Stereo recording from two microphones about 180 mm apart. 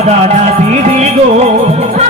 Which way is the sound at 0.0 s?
40° right (ahead or behind).